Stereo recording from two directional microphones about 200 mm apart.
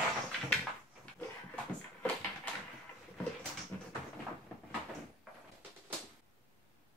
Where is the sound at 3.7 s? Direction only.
10° left (ahead or behind).